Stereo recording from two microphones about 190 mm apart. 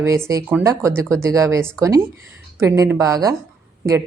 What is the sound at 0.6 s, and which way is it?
A woman's voice, 15° right (ahead or behind).